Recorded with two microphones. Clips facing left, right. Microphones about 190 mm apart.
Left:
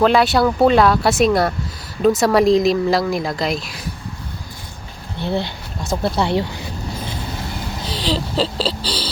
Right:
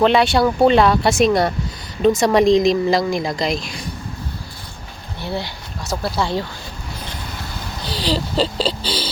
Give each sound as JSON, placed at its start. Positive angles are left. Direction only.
{"t": 0.0, "sound": "speech", "side_deg": 0}
{"t": 5.2, "sound": "speech", "side_deg": 20}
{"t": 7.9, "sound": "speech", "side_deg": 0}